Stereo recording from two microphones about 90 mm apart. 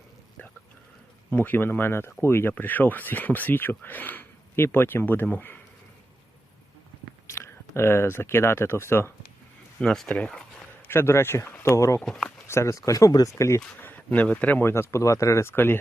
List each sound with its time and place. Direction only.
1.3 s speech: 20° left (ahead or behind)
7.3 s speech: 30° left (ahead or behind)
9.8 s speech: 5° left (ahead or behind)
10.8 s speech: 30° left (ahead or behind)
11.9 s speech: 5° left (ahead or behind)
12.5 s speech: 30° left (ahead or behind)
13.3 s speech: 30° left (ahead or behind)
13.8 s speech: 20° left (ahead or behind)
15.5 s speech: 25° left (ahead or behind)